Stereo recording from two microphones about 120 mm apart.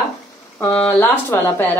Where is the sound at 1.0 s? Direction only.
20° left (ahead or behind).